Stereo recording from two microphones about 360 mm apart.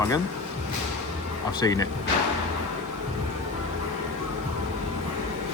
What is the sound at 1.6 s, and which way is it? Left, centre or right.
Speech, centre.